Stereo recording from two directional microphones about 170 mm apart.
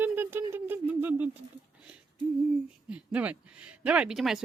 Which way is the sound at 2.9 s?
10° right (ahead or behind).